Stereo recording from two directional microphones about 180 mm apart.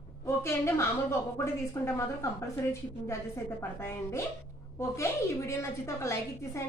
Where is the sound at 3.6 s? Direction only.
15° left (ahead or behind).